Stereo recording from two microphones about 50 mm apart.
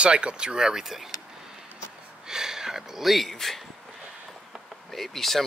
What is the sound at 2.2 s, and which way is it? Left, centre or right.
Gasp, centre.